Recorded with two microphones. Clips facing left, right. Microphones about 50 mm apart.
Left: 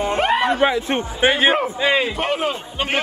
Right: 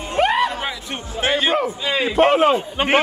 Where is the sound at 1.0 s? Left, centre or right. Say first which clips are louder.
Left 1 dB; centre.